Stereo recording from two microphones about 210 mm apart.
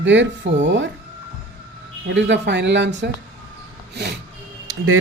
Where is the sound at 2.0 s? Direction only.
55° right (ahead or behind).